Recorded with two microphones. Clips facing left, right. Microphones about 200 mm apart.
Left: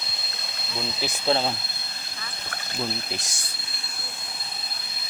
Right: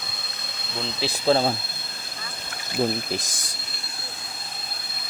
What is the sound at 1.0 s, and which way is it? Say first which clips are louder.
Speech: right 4 dB; 40° right (ahead or behind).